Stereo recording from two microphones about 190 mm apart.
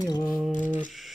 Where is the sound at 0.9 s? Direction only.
Centre (ahead or behind).